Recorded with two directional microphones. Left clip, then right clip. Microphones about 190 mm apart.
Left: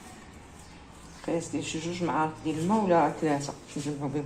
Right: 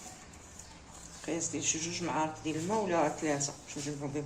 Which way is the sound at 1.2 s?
25° left (ahead or behind).